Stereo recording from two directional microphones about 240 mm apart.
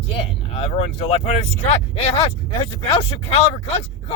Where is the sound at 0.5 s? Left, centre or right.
Left.